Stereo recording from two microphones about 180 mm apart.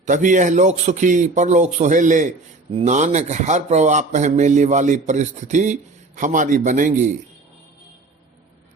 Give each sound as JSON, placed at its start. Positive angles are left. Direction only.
{"t": 0.0, "sound": "a man's voice", "side_deg": -45}